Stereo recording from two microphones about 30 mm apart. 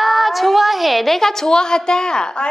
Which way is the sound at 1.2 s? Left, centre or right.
Centre.